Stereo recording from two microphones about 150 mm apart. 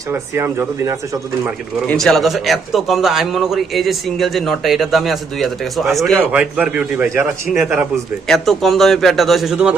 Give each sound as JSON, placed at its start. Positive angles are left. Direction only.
{"t": 0.1, "sound": "speech", "side_deg": -15}
{"t": 1.9, "sound": "a man's voice", "side_deg": 5}
{"t": 6.3, "sound": "a man's voice", "side_deg": -10}